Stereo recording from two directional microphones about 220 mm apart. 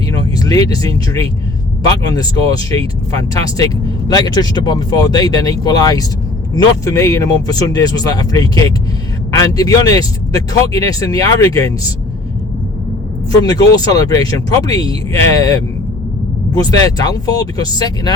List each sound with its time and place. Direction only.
0.3 s a man's voice: 15° left (ahead or behind)
4.1 s a man's voice: 20° left (ahead or behind)
13.4 s a man's voice: 15° left (ahead or behind)